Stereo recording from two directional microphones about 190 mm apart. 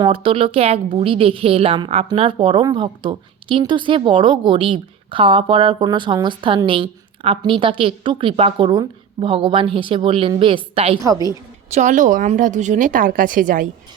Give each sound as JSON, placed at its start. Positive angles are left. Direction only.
{"t": 0.0, "sound": "a woman's voice", "side_deg": -30}
{"t": 11.0, "sound": "a woman's voice", "side_deg": -20}
{"t": 11.7, "sound": "a woman's voice", "side_deg": -40}